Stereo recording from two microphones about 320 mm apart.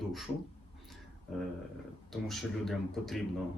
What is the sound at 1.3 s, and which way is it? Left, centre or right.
Speech, centre.